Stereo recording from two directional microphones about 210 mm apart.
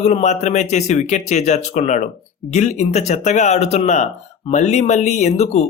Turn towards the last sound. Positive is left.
turn(degrees=35)  # may be behind; listen again after turning